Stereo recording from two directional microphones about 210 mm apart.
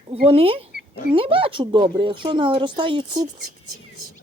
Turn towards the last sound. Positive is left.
turn(degrees=-25)  # may be behind; listen again after turning